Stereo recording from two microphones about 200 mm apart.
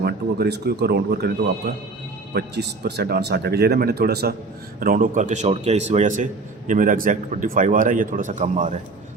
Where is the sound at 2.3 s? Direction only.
55° right (ahead or behind).